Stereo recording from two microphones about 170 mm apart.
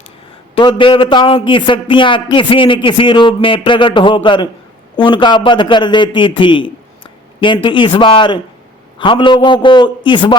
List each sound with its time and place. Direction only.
0.5 s a man's voice: 30° left (ahead or behind)